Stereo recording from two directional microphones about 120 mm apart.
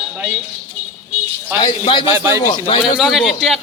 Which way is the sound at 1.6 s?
40° left (ahead or behind).